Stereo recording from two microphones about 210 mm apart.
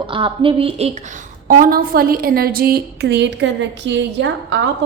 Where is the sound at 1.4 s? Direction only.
40° right (ahead or behind).